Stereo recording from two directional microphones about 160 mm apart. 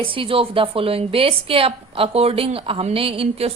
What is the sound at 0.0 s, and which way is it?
A woman's voice, 35° right (ahead or behind).